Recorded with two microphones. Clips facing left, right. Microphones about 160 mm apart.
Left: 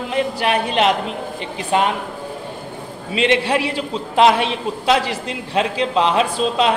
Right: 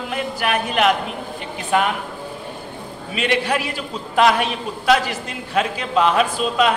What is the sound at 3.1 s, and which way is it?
A man's voice, 25° left (ahead or behind).